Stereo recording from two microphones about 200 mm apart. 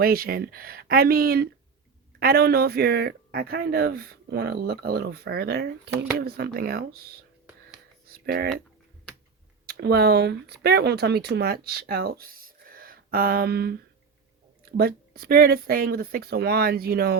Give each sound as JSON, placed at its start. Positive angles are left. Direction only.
{"t": 0.0, "sound": "speech", "side_deg": -50}
{"t": 8.0, "sound": "speech", "side_deg": -50}
{"t": 9.6, "sound": "speech", "side_deg": -50}